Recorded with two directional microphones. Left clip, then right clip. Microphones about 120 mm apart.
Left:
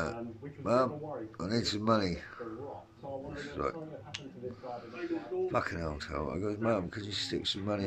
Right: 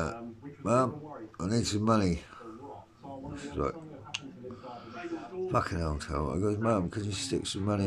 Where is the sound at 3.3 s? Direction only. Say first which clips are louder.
Right 3 dB; 15° right (ahead or behind).